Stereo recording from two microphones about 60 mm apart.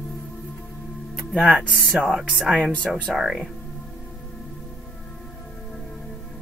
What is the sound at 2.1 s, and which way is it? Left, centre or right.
Speech, centre.